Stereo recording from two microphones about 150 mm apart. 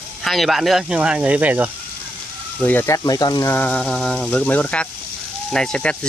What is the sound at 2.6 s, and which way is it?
Sizzle, 15° left (ahead or behind).